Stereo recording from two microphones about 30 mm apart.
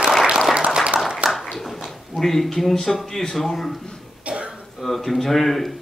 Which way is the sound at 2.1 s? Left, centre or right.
Centre.